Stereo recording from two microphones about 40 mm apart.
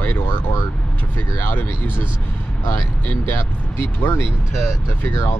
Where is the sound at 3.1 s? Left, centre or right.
Left.